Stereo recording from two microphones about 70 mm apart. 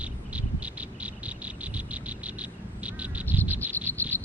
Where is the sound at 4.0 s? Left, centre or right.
Left.